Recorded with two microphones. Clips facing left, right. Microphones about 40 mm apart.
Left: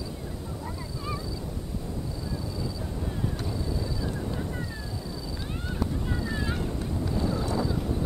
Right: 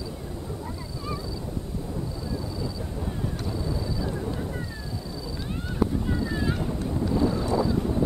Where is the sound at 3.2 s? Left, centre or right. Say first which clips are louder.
Right 1 dB; centre.